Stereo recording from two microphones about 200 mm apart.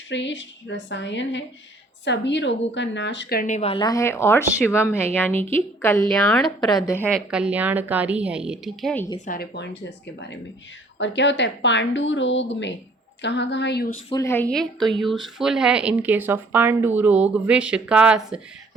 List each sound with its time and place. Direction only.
0.1 s a woman's voice: 65° left (ahead or behind); by 6.1 s 15° left (ahead or behind)
6.1 s a woman's voice: centre (ahead or behind)
6.7 s a woman's voice: 20° left (ahead or behind)
7.3 s a woman's voice: 5° right (ahead or behind)
9.2 s speech: 45° left (ahead or behind)
10.9 s a woman's voice: 65° left (ahead or behind)
14.1 s a woman's voice: 15° left (ahead or behind); by 18.3 s 5° right (ahead or behind)